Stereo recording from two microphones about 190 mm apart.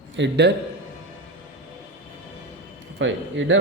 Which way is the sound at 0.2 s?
65° right (ahead or behind).